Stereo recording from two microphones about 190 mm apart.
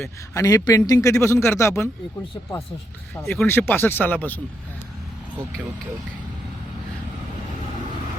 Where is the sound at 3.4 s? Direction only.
10° left (ahead or behind).